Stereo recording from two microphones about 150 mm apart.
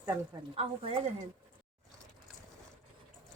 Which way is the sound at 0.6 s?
40° right (ahead or behind).